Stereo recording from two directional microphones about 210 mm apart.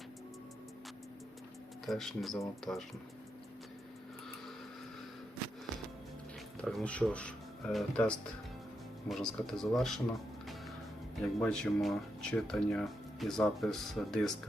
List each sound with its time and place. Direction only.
1.9 s speech: centre (ahead or behind)
2.7 s speech: 15° left (ahead or behind)
6.6 s speech: 5° left (ahead or behind)
11.2 s speech: 5° left (ahead or behind)